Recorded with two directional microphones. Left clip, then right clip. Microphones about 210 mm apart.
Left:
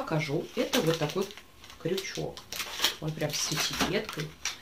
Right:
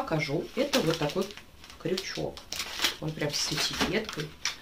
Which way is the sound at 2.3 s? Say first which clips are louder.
Right 1 dB; 5° right (ahead or behind).